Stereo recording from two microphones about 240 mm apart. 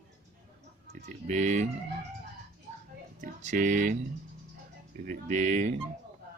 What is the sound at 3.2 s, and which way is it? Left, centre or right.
Speech, right.